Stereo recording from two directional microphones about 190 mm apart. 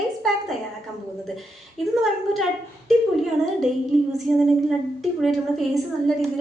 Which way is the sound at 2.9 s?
Centre (ahead or behind).